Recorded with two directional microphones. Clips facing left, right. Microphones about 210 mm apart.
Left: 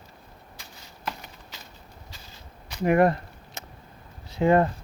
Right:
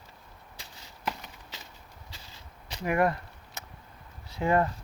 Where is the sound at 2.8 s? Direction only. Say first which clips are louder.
Left 6 dB; 30° left (ahead or behind).